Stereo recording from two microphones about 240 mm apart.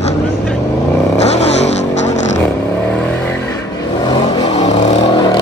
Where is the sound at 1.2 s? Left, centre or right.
Left.